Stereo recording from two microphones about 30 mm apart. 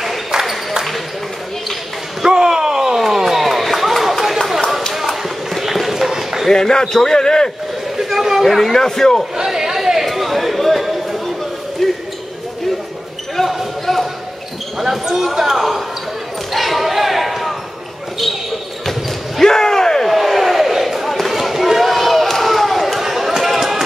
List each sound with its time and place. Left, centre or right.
2.3 s a sound: right; by 4.4 s centre
5.0 s run: centre
6.5 s a man's voice: left
8.0 s chatter: centre
8.5 s a man's voice: centre
8.7 s a man's voice: centre
9.5 s chatter: centre
10.0 s a sound: centre
11.8 s basketball bounce: centre
13.4 s basketball bounce: centre
15.1 s speech: centre
16.5 s basketball bounce: centre
19.4 s slam: centre
20.1 s a sound: centre